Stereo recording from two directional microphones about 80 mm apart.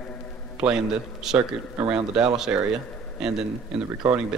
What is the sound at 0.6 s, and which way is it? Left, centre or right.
A man's voice, centre.